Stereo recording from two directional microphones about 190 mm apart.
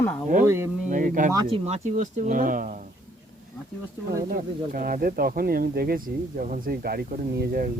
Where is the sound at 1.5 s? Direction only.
35° right (ahead or behind).